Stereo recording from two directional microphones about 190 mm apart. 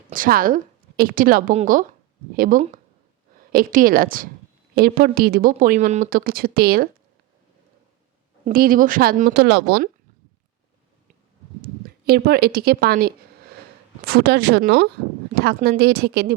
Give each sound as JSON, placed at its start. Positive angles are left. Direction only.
{"t": 0.1, "sound": "a woman's voice", "side_deg": -50}
{"t": 8.4, "sound": "a woman's voice", "side_deg": -50}
{"t": 11.6, "sound": "speech", "side_deg": -55}